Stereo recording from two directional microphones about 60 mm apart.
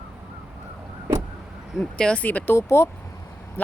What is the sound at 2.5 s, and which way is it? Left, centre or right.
Speech, left.